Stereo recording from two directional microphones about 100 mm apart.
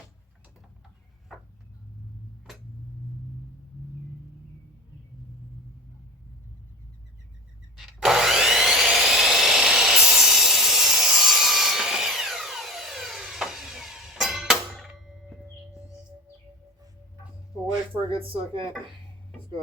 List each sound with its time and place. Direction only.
7.8 s wood: 5° right (ahead or behind)
18.1 s speech: 65° right (ahead or behind)